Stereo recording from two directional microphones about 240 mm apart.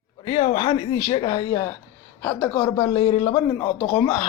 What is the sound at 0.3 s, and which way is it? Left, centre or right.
Speech, centre.